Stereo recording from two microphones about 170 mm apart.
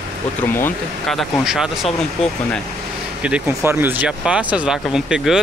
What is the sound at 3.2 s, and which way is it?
Speech, 5° right (ahead or behind).